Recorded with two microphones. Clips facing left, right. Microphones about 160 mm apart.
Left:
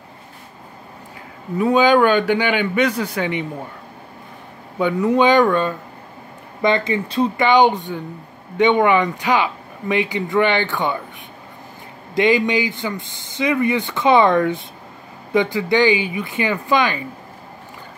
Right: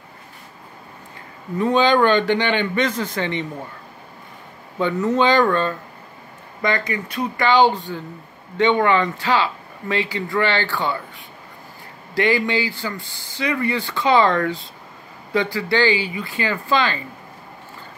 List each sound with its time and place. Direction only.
1.6 s speech: 10° left (ahead or behind)
4.7 s speech: 10° left (ahead or behind)
6.6 s speech: 25° left (ahead or behind)